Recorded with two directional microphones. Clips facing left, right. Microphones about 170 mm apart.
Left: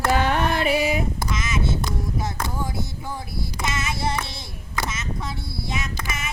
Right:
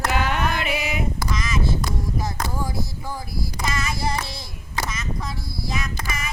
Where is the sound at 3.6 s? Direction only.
5° left (ahead or behind).